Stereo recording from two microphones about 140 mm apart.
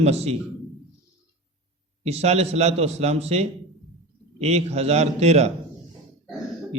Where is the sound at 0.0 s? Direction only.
50° right (ahead or behind).